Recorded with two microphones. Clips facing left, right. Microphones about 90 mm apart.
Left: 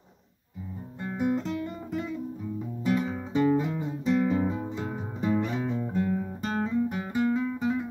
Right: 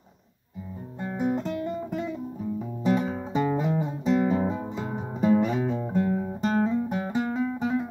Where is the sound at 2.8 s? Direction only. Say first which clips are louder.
Right 2 dB; 25° right (ahead or behind).